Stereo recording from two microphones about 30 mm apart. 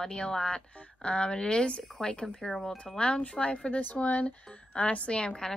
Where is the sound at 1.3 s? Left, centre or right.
Left.